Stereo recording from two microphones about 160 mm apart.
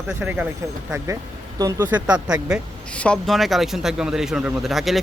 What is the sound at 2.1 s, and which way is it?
Speech, 5° right (ahead or behind).